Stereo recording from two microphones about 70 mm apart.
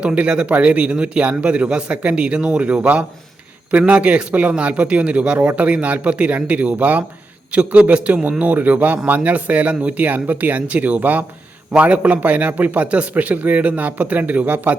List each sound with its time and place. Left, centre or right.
0.0 s a man's voice: centre